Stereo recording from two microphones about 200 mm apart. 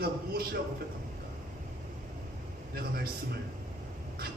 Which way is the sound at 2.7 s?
50° right (ahead or behind).